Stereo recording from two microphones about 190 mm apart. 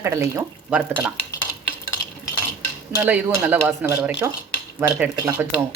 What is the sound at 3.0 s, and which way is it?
Speech, 10° right (ahead or behind).